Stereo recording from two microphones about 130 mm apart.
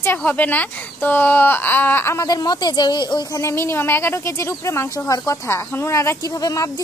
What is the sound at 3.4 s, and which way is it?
Speech, 20° left (ahead or behind).